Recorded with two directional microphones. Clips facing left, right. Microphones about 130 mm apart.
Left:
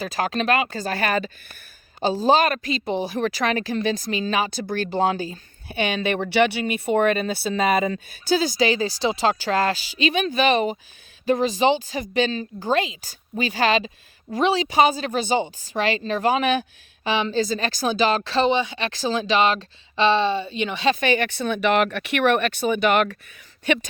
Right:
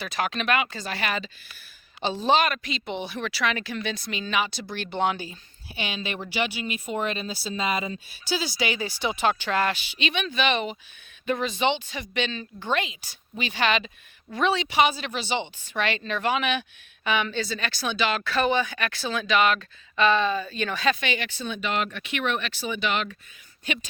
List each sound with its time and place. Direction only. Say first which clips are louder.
0.0 s speech: left 4 dB; 40° left (ahead or behind)
5.6 s speech: left 9 dB; 55° left (ahead or behind)
17.0 s speech: left 4 dB; 30° left (ahead or behind)
18.9 s speech: left 4 dB; 35° left (ahead or behind)
21.0 s speech: left 8 dB; 50° left (ahead or behind)